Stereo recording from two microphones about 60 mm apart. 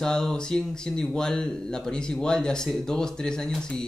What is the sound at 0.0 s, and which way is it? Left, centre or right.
Speech, centre.